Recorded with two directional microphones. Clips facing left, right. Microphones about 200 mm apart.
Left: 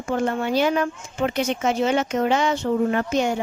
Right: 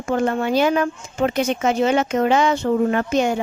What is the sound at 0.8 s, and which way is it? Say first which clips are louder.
Speech: right 3 dB; 50° right (ahead or behind).